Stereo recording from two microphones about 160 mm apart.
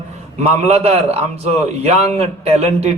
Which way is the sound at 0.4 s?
40° right (ahead or behind).